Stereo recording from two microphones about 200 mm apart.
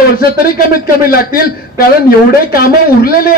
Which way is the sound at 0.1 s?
50° left (ahead or behind).